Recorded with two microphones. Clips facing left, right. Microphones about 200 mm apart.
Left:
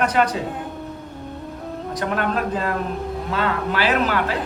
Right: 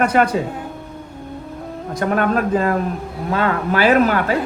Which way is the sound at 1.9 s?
50° right (ahead or behind).